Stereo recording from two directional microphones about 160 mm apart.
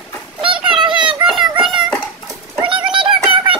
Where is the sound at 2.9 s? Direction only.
35° right (ahead or behind).